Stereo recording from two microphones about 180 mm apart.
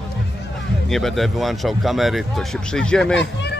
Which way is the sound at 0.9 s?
Centre (ahead or behind).